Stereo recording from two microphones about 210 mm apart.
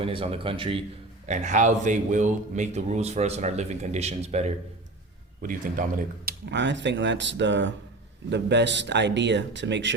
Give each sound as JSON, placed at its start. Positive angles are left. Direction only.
{"t": 0.0, "sound": "a man's voice", "side_deg": -25}
{"t": 6.2, "sound": "speech", "side_deg": -55}